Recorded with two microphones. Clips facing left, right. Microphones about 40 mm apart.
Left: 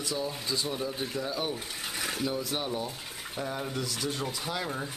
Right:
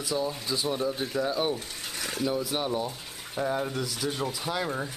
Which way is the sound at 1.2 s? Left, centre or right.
Right.